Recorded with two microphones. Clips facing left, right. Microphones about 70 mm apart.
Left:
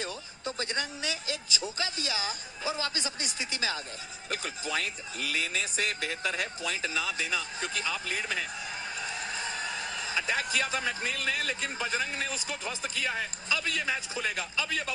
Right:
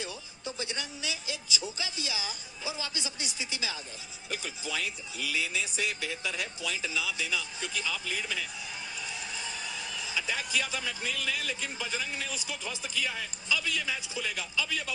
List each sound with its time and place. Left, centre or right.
0.0 s speech: left